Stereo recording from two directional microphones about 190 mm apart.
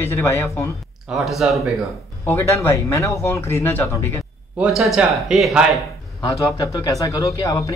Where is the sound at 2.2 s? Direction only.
15° left (ahead or behind).